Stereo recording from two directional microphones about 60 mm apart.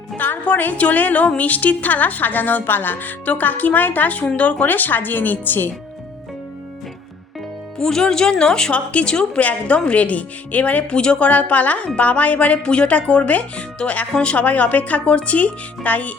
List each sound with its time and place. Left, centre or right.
0.2 s a woman's voice: left
7.8 s a woman's voice: centre; by 16.1 s left